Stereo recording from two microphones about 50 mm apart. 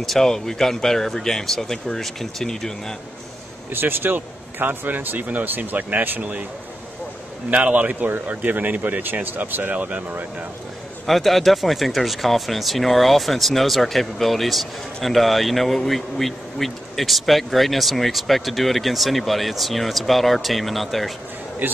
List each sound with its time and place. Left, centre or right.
0.0 s speech: centre
3.7 s speech: right
7.5 s speech: right
11.1 s speech: centre